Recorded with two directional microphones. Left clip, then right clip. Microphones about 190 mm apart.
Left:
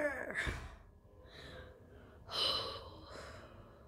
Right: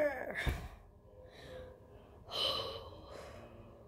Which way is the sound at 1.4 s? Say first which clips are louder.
Right 2 dB; 15° left (ahead or behind).